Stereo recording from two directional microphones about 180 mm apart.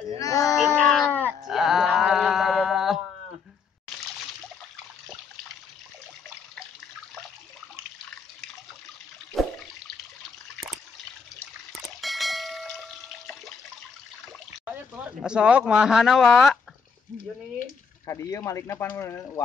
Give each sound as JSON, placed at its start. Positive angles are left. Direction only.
{"t": 0.2, "sound": "child singing", "side_deg": 20}
{"t": 0.6, "sound": "baby cry", "side_deg": 0}
{"t": 1.5, "sound": "a sound", "side_deg": 0}
{"t": 9.3, "sound": "water", "side_deg": 0}
{"t": 12.0, "sound": "a sound", "side_deg": 0}
{"t": 15.0, "sound": "speech", "side_deg": -5}
{"t": 17.6, "sound": "speech", "side_deg": 15}